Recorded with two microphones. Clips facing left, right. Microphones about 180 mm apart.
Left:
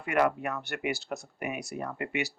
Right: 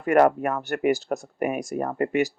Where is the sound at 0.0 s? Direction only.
45° right (ahead or behind).